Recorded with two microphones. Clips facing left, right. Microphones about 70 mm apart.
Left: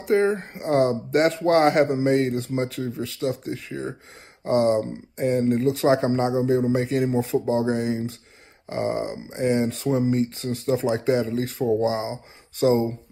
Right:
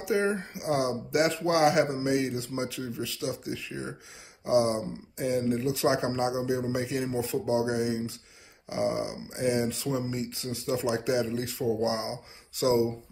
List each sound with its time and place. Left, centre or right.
0.0 s speech: left